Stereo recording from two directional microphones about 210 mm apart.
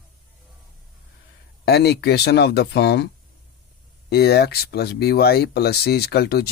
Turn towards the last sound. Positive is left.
turn(degrees=50)  # may be behind; listen again after turning